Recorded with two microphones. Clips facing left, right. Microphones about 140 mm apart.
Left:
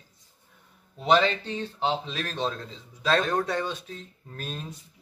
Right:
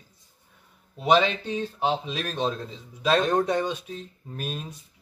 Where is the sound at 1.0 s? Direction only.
10° right (ahead or behind).